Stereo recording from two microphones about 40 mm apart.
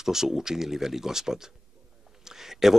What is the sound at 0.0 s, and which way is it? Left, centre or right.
Speech, centre.